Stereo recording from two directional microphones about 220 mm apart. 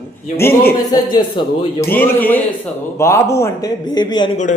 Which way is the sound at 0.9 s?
20° left (ahead or behind).